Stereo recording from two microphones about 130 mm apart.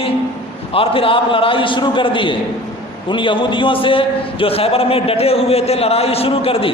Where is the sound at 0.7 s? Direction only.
45° left (ahead or behind).